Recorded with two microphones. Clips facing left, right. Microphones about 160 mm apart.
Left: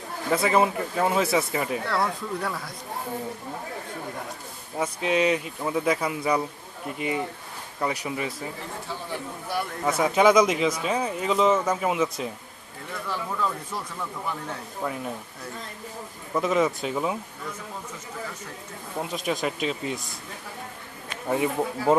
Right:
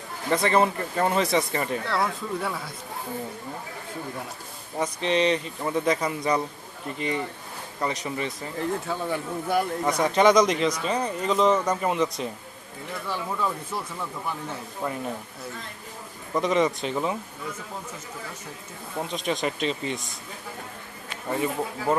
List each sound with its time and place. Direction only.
0.3 s speech: 5° left (ahead or behind)
4.8 s speech: 5° left (ahead or behind)
8.9 s speech: 55° right (ahead or behind)
9.8 s speech: 5° left (ahead or behind)
13.1 s speech: 10° right (ahead or behind)
16.3 s speech: centre (ahead or behind)
18.9 s speech: 5° left (ahead or behind)
21.2 s speech: 15° left (ahead or behind)